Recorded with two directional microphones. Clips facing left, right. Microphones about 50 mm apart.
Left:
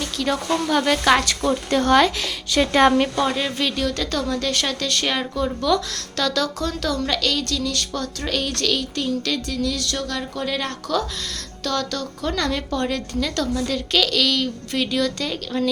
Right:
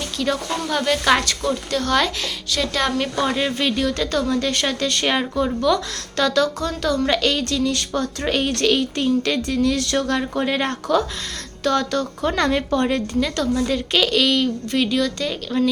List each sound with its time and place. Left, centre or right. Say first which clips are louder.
0.2 s speech: left 1 dB; centre; by 2.9 s left
3.0 s speech: even; centre
7.1 s a woman's voice: right 3 dB; right; by 15.7 s centre